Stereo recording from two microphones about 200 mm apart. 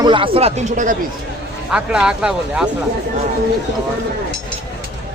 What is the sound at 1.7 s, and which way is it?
Speech, 5° right (ahead or behind).